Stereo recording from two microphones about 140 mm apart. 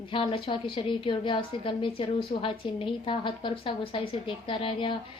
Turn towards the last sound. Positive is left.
turn(degrees=40)  # may be behind; listen again after turning